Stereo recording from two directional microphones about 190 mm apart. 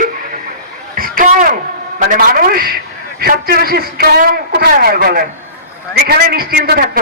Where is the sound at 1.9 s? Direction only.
45° right (ahead or behind).